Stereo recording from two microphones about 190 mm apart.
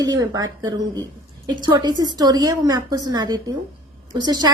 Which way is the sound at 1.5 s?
20° right (ahead or behind).